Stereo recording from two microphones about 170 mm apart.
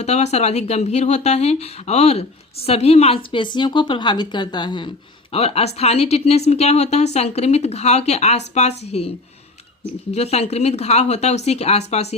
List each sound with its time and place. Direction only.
0.0 s a woman's voice: 40° left (ahead or behind)
10.1 s speech: 40° left (ahead or behind)